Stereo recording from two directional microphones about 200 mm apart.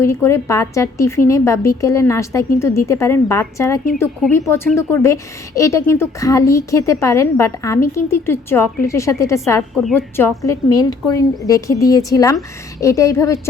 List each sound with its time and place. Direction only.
0.0 s a woman's voice: 15° left (ahead or behind)